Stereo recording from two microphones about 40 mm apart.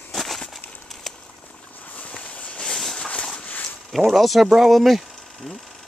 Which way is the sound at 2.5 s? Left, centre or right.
Centre.